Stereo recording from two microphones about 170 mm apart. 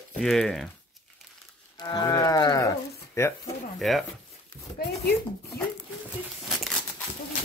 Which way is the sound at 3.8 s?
Centre (ahead or behind).